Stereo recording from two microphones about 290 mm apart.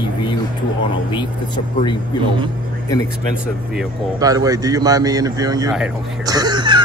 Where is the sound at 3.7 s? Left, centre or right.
Centre.